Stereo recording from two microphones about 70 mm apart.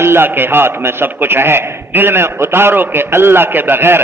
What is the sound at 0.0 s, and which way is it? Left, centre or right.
A man's voice, right.